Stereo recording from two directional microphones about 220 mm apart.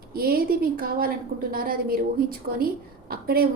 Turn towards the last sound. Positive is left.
turn(degrees=-40)  # may be behind; listen again after turning